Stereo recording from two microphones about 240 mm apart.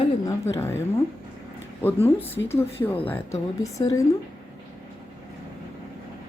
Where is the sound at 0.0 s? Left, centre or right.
Centre.